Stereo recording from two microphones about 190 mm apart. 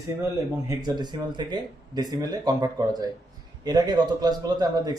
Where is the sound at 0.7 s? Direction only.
20° right (ahead or behind).